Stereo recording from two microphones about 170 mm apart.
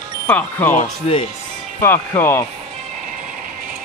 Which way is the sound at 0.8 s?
35° left (ahead or behind).